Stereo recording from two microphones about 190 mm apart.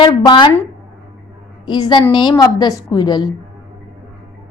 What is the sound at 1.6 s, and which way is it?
A woman's voice, 20° left (ahead or behind).